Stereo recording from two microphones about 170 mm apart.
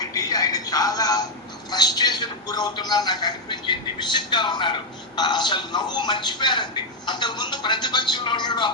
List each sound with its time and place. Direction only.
0.0 s music: 20° left (ahead or behind)
1.7 s a man's voice: 25° left (ahead or behind)